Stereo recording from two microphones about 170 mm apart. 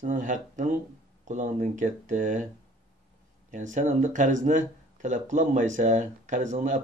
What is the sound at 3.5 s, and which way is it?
Speech, 45° right (ahead or behind).